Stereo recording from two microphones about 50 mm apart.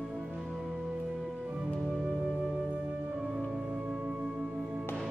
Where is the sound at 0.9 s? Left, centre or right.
Centre.